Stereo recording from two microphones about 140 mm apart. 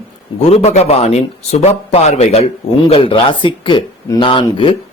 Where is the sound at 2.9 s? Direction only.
40° left (ahead or behind).